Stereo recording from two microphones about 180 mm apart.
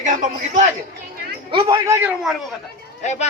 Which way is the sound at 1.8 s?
15° right (ahead or behind).